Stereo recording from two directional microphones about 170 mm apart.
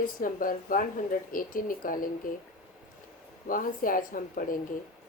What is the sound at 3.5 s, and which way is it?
A woman's voice, 55° left (ahead or behind).